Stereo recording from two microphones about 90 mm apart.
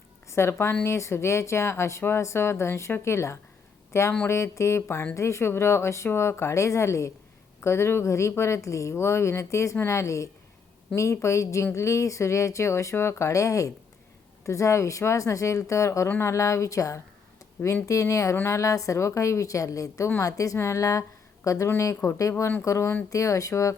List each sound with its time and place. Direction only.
0.3 s a woman's voice: 30° left (ahead or behind)